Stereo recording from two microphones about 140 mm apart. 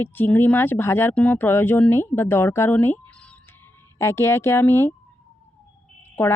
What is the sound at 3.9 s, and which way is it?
Speech, 20° left (ahead or behind).